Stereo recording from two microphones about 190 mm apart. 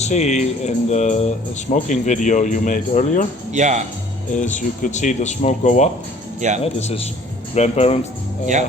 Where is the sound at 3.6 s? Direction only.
40° right (ahead or behind).